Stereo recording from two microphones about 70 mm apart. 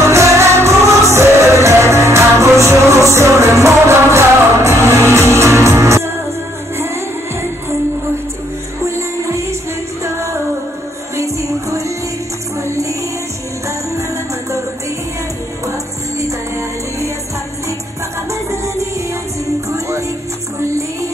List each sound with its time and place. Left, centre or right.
0.0 s music: right
8.8 s music: right
11.1 s music: right
18.3 s music: right